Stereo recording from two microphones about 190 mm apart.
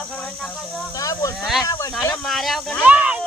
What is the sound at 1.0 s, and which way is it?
Speech, 15° left (ahead or behind).